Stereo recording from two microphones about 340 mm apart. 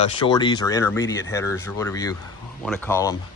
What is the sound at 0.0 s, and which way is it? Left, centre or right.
Speech, centre.